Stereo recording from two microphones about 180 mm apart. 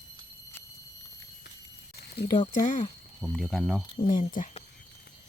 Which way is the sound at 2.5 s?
45° left (ahead or behind).